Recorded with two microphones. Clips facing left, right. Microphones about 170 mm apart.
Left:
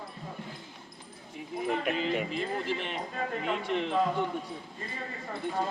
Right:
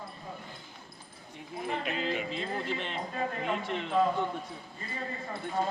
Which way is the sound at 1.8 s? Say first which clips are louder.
Left 3 dB; 55° left (ahead or behind).